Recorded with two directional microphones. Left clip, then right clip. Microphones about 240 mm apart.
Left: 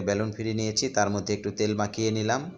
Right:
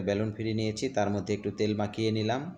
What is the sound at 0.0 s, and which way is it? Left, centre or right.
Speech, centre.